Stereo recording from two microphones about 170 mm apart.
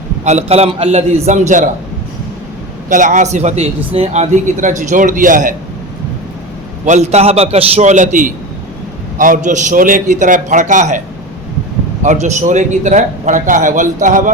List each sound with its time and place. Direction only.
0.3 s a man's voice: 40° right (ahead or behind)
2.9 s a man's voice: 50° right (ahead or behind)
6.8 s a man's voice: 45° right (ahead or behind)
12.0 s a man's voice: 45° right (ahead or behind)